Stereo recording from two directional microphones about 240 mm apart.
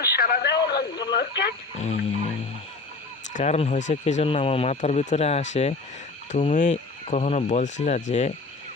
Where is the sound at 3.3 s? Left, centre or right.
Left.